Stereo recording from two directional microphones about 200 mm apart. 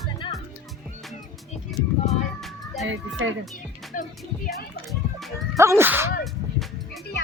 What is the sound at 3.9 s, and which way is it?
Speech, 40° left (ahead or behind).